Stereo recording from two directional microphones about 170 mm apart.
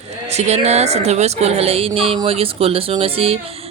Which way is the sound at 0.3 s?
40° right (ahead or behind).